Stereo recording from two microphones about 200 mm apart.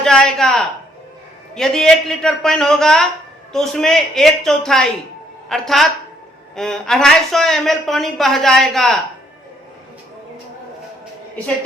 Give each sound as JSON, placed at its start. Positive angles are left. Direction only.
{"t": 0.0, "sound": "speech", "side_deg": 5}